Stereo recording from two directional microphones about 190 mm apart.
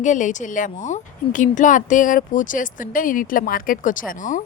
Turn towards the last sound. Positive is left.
turn(degrees=45)  # may be behind; listen again after turning